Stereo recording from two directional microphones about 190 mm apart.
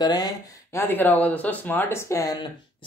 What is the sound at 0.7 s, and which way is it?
Speech, 10° left (ahead or behind).